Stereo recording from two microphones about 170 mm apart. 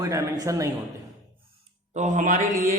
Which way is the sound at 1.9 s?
45° right (ahead or behind).